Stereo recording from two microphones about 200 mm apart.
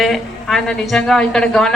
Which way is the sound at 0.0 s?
Centre (ahead or behind).